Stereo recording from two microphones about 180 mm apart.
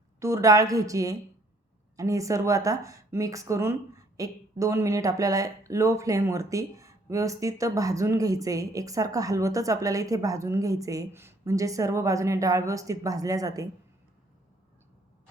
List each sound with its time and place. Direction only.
0.2 s a woman's voice: 15° right (ahead or behind)